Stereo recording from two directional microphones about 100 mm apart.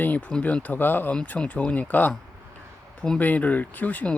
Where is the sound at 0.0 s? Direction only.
15° left (ahead or behind).